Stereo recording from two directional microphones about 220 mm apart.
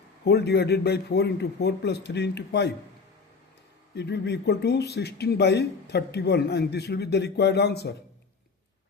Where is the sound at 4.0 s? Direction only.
50° left (ahead or behind).